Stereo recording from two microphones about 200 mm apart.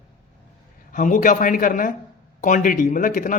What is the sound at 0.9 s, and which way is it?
Speech, 40° left (ahead or behind).